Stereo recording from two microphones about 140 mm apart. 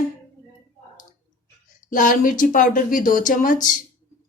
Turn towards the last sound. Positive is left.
turn(degrees=75)  # may be behind; listen again after turning